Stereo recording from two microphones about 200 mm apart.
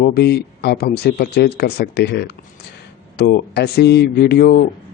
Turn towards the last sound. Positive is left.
turn(degrees=50)  # may be behind; listen again after turning